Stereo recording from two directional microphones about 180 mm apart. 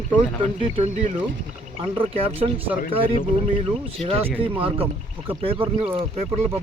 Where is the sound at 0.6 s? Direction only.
40° right (ahead or behind).